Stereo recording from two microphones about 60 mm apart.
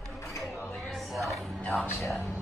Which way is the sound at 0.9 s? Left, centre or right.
Centre.